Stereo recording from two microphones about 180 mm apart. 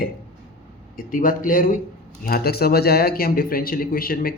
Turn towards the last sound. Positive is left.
turn(degrees=55)  # may be behind; listen again after turning